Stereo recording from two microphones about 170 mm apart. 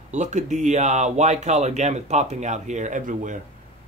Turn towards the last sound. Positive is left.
turn(degrees=-50)  # may be behind; listen again after turning